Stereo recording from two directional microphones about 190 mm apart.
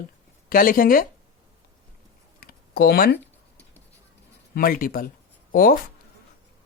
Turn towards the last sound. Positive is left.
turn(degrees=50)  # may be behind; listen again after turning